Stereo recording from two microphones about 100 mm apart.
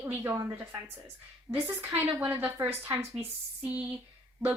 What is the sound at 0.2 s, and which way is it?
A woman's voice, 35° right (ahead or behind).